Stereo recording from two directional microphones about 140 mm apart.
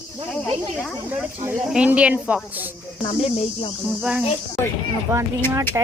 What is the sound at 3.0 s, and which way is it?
Speech, 40° left (ahead or behind).